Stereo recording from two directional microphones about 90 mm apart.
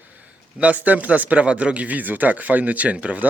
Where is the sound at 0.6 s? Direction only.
15° right (ahead or behind).